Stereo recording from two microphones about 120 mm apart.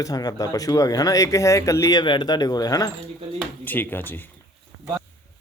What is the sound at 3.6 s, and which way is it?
Speech, 15° left (ahead or behind).